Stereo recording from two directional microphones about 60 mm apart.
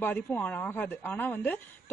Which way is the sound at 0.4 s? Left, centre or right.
Left.